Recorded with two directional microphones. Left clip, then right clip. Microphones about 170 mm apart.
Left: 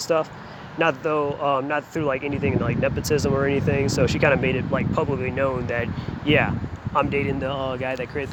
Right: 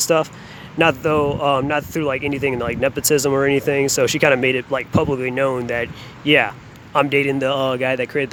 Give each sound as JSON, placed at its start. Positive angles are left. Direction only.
{"t": 0.0, "sound": "speech", "side_deg": -40}